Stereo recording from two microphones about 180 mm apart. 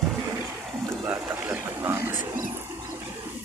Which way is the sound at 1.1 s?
10° right (ahead or behind).